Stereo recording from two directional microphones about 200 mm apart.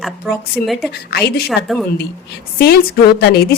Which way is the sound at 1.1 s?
55° left (ahead or behind).